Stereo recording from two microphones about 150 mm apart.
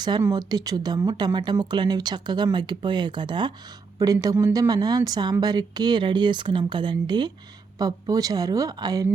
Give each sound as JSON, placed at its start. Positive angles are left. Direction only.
{"t": 0.2, "sound": "a woman's voice", "side_deg": -25}